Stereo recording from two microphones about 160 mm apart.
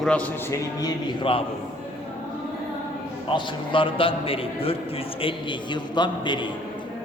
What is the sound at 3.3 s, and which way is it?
A man's voice, 30° left (ahead or behind).